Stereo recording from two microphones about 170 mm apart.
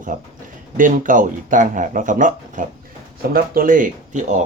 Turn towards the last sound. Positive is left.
turn(degrees=-45)  # may be behind; listen again after turning